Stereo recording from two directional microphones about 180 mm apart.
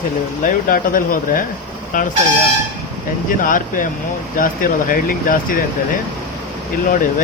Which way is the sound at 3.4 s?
50° left (ahead or behind).